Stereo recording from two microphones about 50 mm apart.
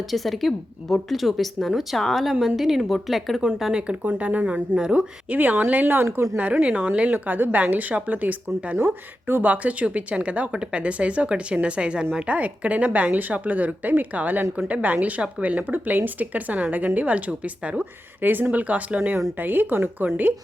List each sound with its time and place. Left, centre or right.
0.1 s a woman's voice: centre
3.6 s speech: centre
4.0 s speech: right
5.3 s speech: right
8.8 s speech: right
9.4 s speech: right
18.2 s speech: right